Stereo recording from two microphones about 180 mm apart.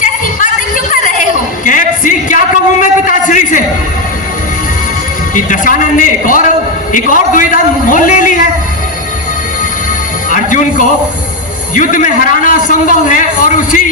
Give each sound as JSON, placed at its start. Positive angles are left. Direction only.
{"t": 0.9, "sound": "a sound", "side_deg": 45}
{"t": 5.3, "sound": "a man's voice", "side_deg": 45}
{"t": 10.2, "sound": "music", "side_deg": 45}
{"t": 11.7, "sound": "a man's voice", "side_deg": 45}